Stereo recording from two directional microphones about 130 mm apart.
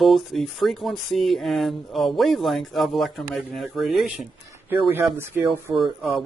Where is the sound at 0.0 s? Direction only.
Centre (ahead or behind).